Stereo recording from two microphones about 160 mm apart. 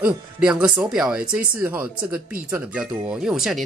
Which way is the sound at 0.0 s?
5° right (ahead or behind).